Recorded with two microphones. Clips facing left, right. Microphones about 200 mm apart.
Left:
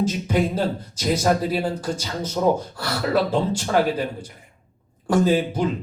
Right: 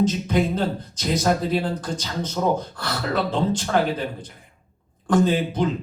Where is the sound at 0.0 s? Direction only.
10° left (ahead or behind).